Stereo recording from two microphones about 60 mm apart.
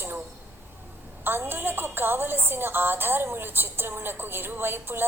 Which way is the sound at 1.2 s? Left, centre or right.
Right.